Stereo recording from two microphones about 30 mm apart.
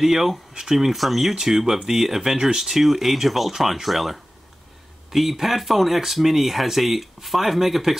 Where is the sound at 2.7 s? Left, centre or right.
Centre.